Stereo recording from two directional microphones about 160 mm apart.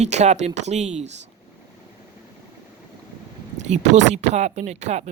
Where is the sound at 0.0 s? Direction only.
45° right (ahead or behind).